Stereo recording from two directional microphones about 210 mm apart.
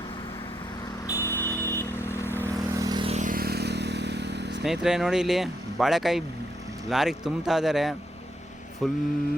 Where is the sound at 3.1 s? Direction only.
40° right (ahead or behind).